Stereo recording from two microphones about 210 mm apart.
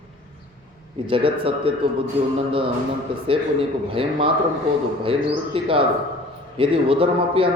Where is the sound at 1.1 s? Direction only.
25° right (ahead or behind).